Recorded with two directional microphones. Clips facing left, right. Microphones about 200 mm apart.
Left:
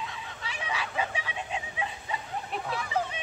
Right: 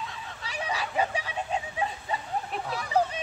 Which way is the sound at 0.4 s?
40° right (ahead or behind).